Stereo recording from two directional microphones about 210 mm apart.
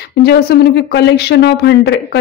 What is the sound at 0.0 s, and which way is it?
Speech, 50° left (ahead or behind).